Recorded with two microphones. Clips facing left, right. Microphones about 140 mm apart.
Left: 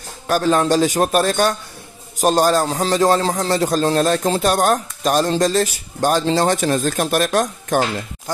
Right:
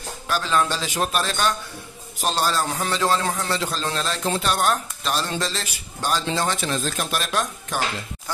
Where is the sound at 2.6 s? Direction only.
30° left (ahead or behind).